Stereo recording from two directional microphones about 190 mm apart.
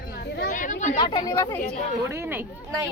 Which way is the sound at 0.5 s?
40° left (ahead or behind).